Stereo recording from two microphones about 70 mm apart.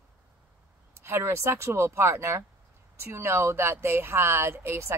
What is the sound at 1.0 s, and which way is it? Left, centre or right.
Speech, right.